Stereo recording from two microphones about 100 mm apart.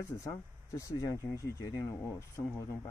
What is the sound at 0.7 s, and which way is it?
Speech, 30° left (ahead or behind).